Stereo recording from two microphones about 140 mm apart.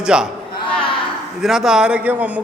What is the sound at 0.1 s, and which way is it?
Speech, 5° right (ahead or behind).